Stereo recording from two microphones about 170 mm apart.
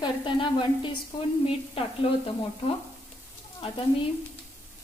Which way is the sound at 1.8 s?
35° left (ahead or behind).